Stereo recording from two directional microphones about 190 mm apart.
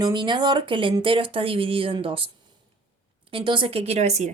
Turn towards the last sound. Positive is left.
turn(degrees=-35)  # may be behind; listen again after turning